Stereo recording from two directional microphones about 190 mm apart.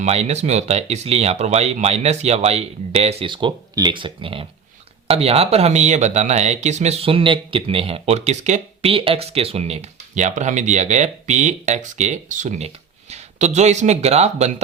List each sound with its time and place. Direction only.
0.0 s speech: 35° right (ahead or behind)